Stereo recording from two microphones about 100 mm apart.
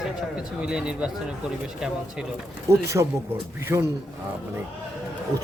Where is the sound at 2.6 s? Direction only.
30° right (ahead or behind).